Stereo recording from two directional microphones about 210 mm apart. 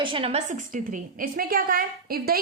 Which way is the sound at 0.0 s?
25° right (ahead or behind).